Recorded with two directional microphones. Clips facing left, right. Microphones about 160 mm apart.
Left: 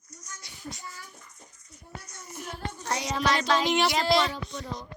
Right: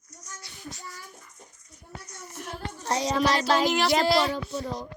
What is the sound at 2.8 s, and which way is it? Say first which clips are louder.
Music: right 4 dB; 30° right (ahead or behind).